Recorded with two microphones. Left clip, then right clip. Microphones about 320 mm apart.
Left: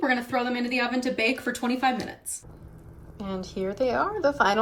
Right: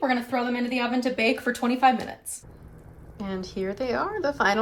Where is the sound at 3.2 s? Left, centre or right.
Centre.